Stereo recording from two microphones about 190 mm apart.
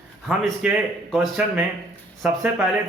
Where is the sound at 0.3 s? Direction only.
5° right (ahead or behind).